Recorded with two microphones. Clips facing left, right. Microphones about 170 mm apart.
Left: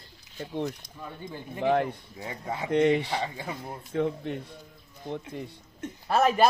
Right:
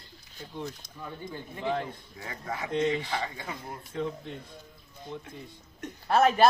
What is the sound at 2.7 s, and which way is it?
Speech, 65° left (ahead or behind).